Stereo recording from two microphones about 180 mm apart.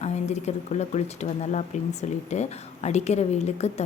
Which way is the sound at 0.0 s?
40° left (ahead or behind).